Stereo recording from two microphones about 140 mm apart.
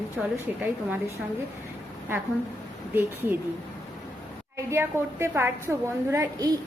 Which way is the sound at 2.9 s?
15° right (ahead or behind).